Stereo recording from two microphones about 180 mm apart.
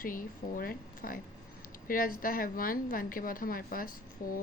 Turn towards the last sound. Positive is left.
turn(degrees=50)  # may be behind; listen again after turning